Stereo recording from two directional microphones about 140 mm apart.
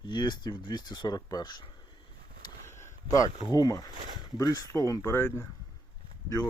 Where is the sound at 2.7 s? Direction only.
20° left (ahead or behind).